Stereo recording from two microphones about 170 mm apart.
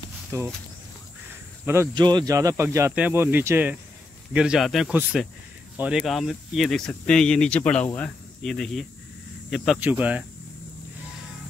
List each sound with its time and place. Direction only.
0.3 s speech: 15° right (ahead or behind)
2.0 s speech: 25° right (ahead or behind); by 10.2 s 10° right (ahead or behind)